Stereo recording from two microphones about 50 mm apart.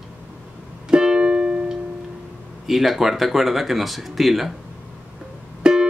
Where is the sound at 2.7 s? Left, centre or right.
Centre.